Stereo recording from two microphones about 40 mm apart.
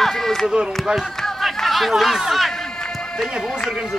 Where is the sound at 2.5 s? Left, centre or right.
Centre.